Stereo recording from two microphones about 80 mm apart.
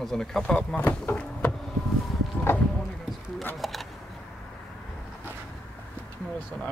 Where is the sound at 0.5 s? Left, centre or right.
Left.